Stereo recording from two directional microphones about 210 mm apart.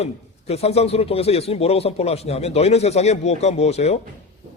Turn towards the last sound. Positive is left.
turn(degrees=30)  # may be behind; listen again after turning